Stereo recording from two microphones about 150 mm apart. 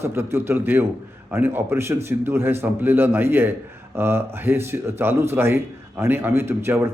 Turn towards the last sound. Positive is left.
turn(degrees=-15)  # may be behind; listen again after turning